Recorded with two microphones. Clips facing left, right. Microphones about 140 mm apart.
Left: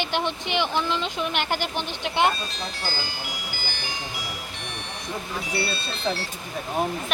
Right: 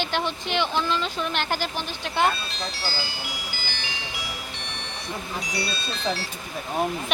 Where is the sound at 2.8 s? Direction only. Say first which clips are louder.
Even; 45° left (ahead or behind).